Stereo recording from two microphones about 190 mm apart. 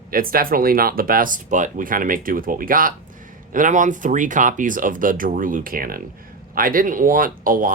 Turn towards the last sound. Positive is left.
turn(degrees=-45)  # may be behind; listen again after turning